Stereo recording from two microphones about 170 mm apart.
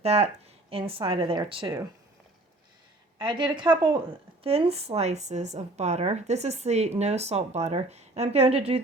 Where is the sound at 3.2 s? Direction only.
30° right (ahead or behind).